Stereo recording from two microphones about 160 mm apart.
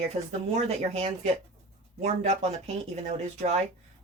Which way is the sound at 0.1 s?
45° right (ahead or behind).